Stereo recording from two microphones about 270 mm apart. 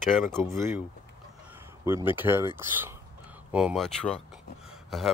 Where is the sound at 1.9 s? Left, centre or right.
Centre.